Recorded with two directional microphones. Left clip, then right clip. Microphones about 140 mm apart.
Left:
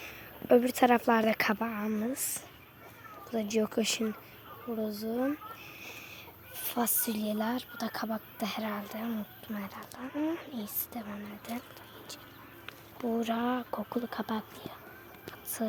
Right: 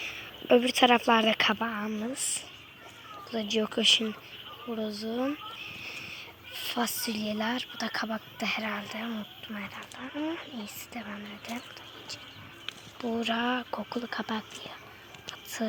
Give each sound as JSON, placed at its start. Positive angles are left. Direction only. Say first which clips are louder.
{"t": 0.0, "sound": "speech", "louder": "right 6 dB", "side_deg": 5}
{"t": 2.0, "sound": "speech", "louder": "right 2 dB", "side_deg": 20}
{"t": 8.4, "sound": "speech", "louder": "right 5 dB", "side_deg": 15}
{"t": 9.5, "sound": "speech", "louder": "right 2 dB", "side_deg": 25}
{"t": 13.0, "sound": "speech", "louder": "right 2 dB", "side_deg": 15}